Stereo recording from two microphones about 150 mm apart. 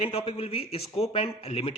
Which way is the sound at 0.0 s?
40° left (ahead or behind).